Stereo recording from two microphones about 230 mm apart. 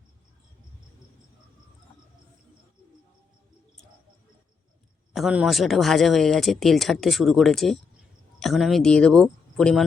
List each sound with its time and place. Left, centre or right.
5.1 s speech: centre